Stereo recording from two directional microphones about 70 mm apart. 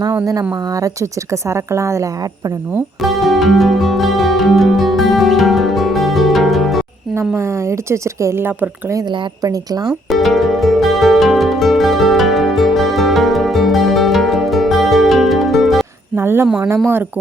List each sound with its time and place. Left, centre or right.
1.3 s a woman's voice: right
3.0 s music: centre
7.2 s speech: right
8.9 s speech: right
10.1 s music: centre
16.1 s speech: right